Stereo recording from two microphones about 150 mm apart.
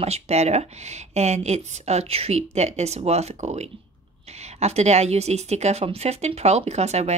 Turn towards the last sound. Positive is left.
turn(degrees=-45)  # may be behind; listen again after turning